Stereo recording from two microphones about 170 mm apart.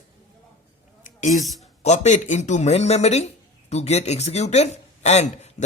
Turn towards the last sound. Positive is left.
turn(degrees=40)  # may be behind; listen again after turning